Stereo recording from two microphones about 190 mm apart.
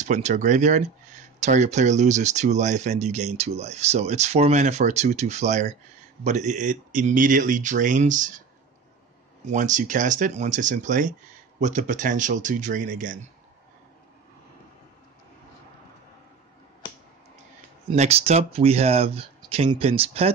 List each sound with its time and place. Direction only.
0.0 s speech: 40° right (ahead or behind)
9.5 s speech: 40° right (ahead or behind)
17.8 s speech: 35° right (ahead or behind)